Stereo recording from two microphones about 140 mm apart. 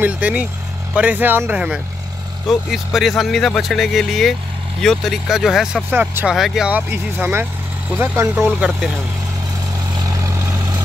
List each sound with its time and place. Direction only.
0.0 s speech: 10° right (ahead or behind)
5.9 s speech: 15° right (ahead or behind)
6.3 s speech: centre (ahead or behind)
6.7 s speech: 15° right (ahead or behind)
8.5 s speech: 5° right (ahead or behind)
9.9 s vehicle: 25° right (ahead or behind)